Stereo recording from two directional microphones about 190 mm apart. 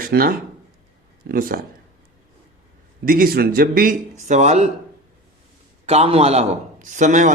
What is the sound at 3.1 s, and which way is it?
Speech, 50° right (ahead or behind).